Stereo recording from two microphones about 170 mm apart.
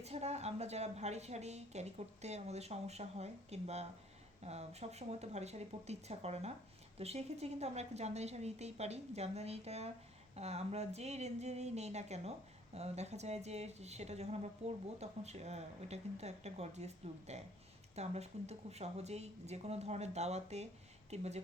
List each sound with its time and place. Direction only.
0.0 s a woman's voice: 40° right (ahead or behind)